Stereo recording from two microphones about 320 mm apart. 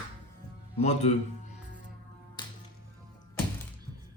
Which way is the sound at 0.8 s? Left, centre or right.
Left.